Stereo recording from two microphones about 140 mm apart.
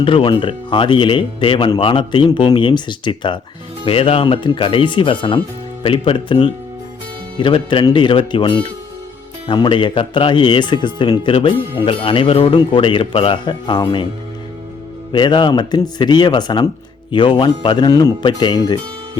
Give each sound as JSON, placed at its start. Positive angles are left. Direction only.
{"t": 0.0, "sound": "speech", "side_deg": 40}
{"t": 15.1, "sound": "speech", "side_deg": 35}